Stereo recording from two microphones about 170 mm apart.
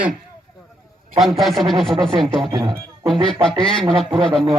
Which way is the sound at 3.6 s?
5° left (ahead or behind).